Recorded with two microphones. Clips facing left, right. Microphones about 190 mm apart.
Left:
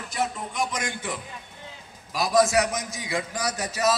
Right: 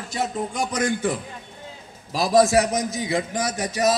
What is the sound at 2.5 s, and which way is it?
Speech, 30° right (ahead or behind).